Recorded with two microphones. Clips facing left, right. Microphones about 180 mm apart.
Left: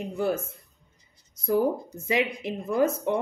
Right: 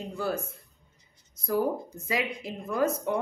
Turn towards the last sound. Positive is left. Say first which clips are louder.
# left 3 dB
turn(degrees=25)  # may be behind; listen again after turning